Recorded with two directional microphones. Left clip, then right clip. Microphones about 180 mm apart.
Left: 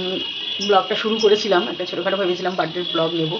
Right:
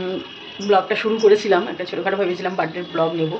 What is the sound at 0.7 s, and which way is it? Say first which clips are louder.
Speech: right 1 dB; centre (ahead or behind).